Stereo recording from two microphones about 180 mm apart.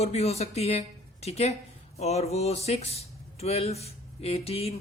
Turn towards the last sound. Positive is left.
turn(degrees=35)  # may be behind; listen again after turning